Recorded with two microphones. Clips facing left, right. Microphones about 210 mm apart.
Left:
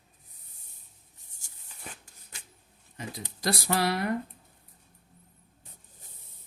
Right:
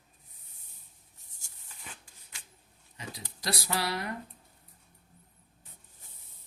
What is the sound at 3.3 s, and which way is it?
Speech, 50° left (ahead or behind).